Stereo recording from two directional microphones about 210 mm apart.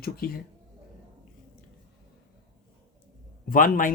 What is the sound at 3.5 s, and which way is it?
Speech, 40° left (ahead or behind).